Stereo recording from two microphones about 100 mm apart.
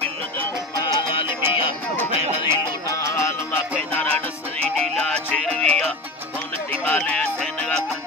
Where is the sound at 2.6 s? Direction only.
30° left (ahead or behind).